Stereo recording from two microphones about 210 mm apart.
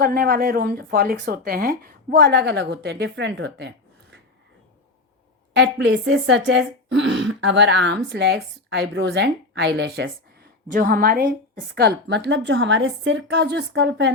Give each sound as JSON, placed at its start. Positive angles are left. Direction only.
{"t": 0.0, "sound": "a woman's voice", "side_deg": -45}
{"t": 5.5, "sound": "speech", "side_deg": -55}
{"t": 10.7, "sound": "a woman's voice", "side_deg": -45}